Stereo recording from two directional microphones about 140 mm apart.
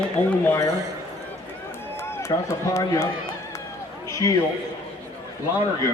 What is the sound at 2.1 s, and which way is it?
Speech, 20° left (ahead or behind).